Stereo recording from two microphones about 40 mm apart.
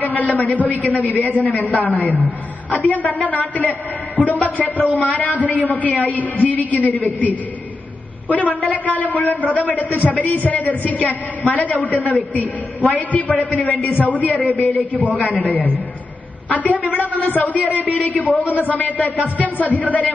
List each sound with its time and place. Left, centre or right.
0.0 s a man's voice: left